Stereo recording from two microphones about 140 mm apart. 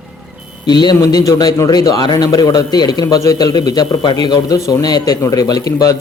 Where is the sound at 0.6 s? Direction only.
30° left (ahead or behind).